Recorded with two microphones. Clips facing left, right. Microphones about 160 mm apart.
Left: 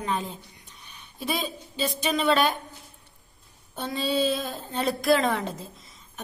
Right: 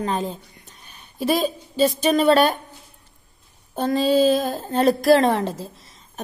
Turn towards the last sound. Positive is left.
turn(degrees=-45)  # may be behind; listen again after turning